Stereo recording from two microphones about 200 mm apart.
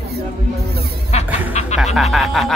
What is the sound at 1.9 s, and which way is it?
Speech, centre (ahead or behind).